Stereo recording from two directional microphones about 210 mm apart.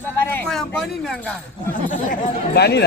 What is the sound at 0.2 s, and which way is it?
Speech, 10° left (ahead or behind).